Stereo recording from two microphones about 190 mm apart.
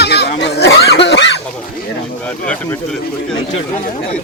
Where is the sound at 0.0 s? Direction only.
60° left (ahead or behind).